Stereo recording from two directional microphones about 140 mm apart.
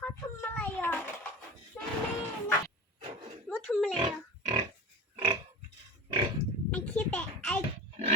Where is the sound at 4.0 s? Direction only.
30° right (ahead or behind).